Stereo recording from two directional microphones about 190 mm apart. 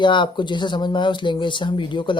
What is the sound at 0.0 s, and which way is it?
Speech, 25° left (ahead or behind).